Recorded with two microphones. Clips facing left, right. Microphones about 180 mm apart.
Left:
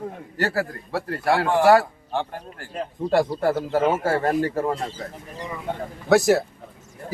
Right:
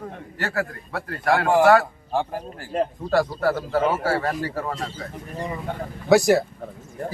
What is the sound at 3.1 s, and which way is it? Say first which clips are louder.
A man's voice: left 1 dB; 25° left (ahead or behind).